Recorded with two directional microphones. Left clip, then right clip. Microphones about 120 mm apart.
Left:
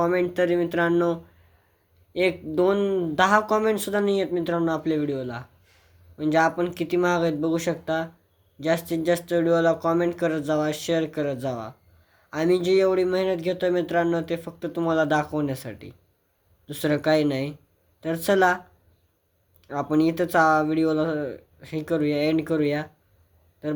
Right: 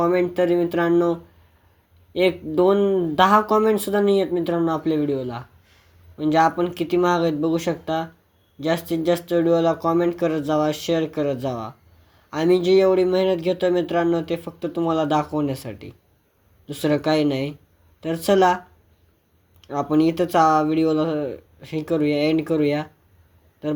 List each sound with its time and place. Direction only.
0.0 s speech: 15° right (ahead or behind)
19.6 s speech: 15° right (ahead or behind)